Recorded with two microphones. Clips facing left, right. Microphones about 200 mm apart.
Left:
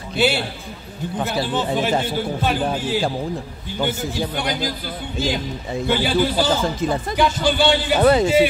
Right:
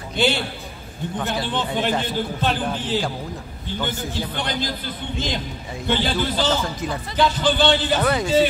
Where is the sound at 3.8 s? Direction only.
10° left (ahead or behind).